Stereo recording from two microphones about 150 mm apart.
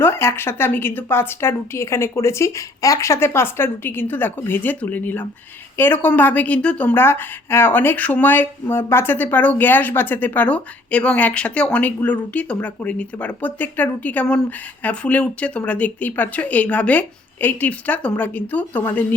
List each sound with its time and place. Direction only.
0.0 s speech: 15° left (ahead or behind)